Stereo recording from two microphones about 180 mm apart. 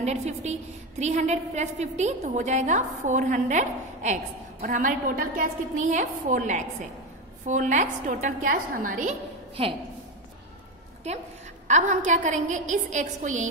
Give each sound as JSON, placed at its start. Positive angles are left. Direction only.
{"t": 0.0, "sound": "a woman's voice", "side_deg": -40}
{"t": 9.6, "sound": "a woman's voice", "side_deg": -35}
{"t": 11.1, "sound": "a woman's voice", "side_deg": -40}